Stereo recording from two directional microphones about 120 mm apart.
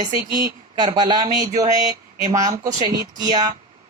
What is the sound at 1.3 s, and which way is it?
Speech, 90° right.